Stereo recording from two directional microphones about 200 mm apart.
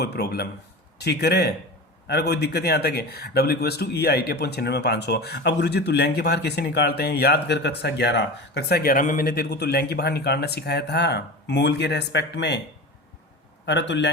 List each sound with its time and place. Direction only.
0.0 s speech: 55° left (ahead or behind)
13.7 s speech: 65° left (ahead or behind)